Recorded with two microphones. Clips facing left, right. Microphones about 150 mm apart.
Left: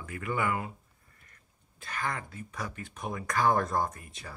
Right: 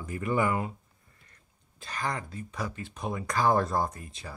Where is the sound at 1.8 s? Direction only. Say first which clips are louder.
Right 2 dB; 30° right (ahead or behind).